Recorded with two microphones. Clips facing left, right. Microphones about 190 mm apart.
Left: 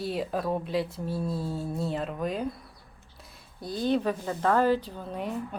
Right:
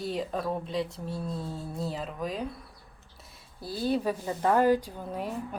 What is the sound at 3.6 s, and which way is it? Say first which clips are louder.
A woman's voice: left 2 dB; 5° right (ahead or behind).